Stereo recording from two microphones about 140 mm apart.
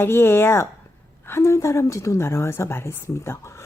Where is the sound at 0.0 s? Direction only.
15° left (ahead or behind).